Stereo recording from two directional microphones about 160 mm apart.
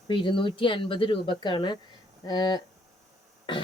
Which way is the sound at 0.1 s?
30° left (ahead or behind).